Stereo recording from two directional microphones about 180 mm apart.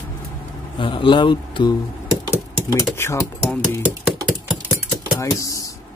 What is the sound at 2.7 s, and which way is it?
Speech, 15° left (ahead or behind).